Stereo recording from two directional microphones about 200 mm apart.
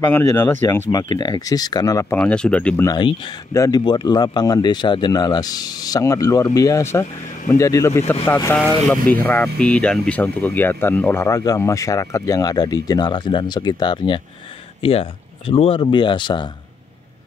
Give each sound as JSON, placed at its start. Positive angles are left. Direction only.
{"t": 0.0, "sound": "speech", "side_deg": 10}
{"t": 2.1, "sound": "speech", "side_deg": 5}
{"t": 2.9, "sound": "speech", "side_deg": 20}